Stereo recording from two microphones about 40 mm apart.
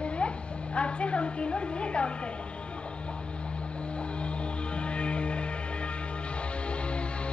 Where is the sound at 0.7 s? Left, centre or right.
Left.